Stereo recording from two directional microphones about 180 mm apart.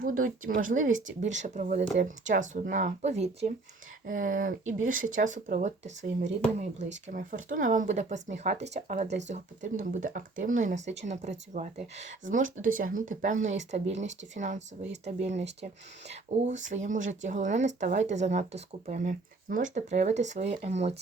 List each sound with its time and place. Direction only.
0.0 s speech: 50° right (ahead or behind)